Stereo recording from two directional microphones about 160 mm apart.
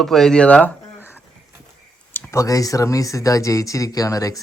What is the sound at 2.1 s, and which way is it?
Speech, 15° left (ahead or behind).